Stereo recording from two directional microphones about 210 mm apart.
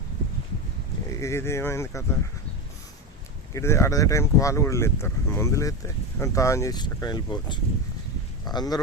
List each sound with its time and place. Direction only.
1.1 s speech: 15° left (ahead or behind)
3.5 s speech: 15° left (ahead or behind)